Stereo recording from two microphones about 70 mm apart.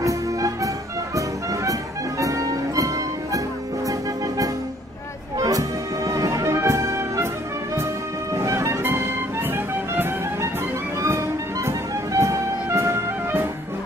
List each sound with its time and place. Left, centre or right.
0.0 s music: right
5.4 s music: right
6.5 s orchestra: right
8.3 s music: right